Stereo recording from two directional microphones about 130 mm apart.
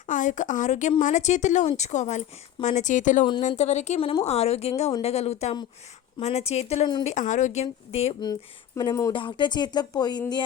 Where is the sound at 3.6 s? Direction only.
60° left (ahead or behind).